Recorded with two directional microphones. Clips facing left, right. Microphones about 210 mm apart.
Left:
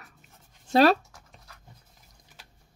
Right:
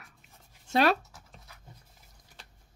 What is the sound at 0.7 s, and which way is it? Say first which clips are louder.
Speech: left 5 dB; 35° left (ahead or behind).